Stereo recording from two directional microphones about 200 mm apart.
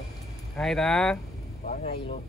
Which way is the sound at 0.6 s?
Centre (ahead or behind).